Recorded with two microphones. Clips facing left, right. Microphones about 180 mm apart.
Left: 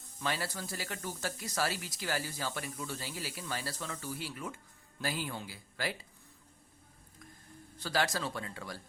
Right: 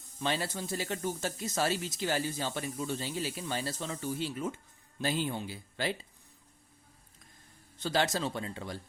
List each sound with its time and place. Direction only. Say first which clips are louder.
0.2 s speech: right 3 dB; 25° right (ahead or behind)
7.8 s speech: right 3 dB; 20° right (ahead or behind)